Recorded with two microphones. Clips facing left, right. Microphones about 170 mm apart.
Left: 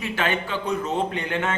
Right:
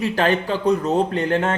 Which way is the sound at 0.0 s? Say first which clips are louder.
Right 6 dB; 35° right (ahead or behind).